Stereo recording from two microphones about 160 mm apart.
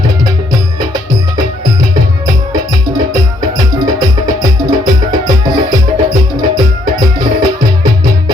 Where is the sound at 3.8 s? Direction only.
25° right (ahead or behind).